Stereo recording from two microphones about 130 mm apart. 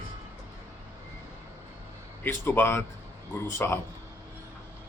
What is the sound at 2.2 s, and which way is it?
Speech, 15° left (ahead or behind).